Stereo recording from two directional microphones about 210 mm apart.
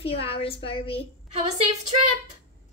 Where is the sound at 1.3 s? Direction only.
30° right (ahead or behind).